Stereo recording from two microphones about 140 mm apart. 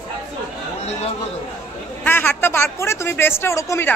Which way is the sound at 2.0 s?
15° left (ahead or behind).